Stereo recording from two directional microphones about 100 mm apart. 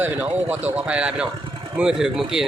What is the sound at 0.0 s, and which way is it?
Speech, 15° right (ahead or behind).